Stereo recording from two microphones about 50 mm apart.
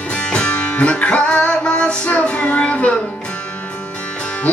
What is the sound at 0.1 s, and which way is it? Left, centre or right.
Music, centre.